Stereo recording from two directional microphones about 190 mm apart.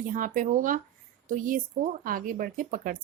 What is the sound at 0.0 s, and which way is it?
Speech, 45° right (ahead or behind).